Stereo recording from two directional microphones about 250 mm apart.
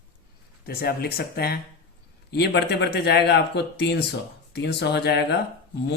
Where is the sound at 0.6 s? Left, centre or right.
Left.